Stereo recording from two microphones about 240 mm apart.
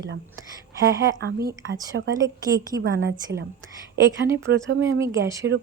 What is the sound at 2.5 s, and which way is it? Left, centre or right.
Speech, right.